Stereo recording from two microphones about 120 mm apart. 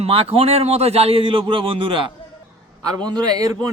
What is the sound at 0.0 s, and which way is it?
A man's voice, 55° right (ahead or behind).